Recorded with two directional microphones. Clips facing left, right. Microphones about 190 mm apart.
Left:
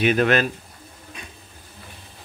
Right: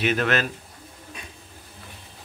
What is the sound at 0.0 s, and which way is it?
Speech, 15° left (ahead or behind).